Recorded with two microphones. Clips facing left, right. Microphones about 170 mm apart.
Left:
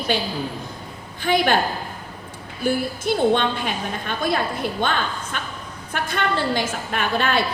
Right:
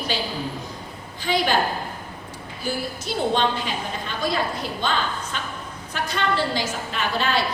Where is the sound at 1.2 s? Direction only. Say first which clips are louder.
Left 3 dB; 55° left (ahead or behind).